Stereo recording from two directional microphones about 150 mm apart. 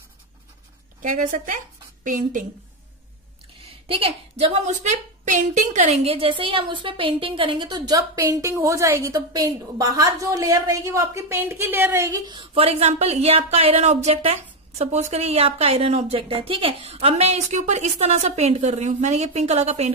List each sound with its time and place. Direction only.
1.0 s speech: 60° right (ahead or behind)
3.8 s a woman's voice: 40° right (ahead or behind); by 12.2 s 15° right (ahead or behind)
12.3 s speech: 35° right (ahead or behind)